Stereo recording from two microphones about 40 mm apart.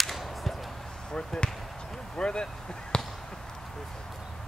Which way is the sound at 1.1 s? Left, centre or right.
Left.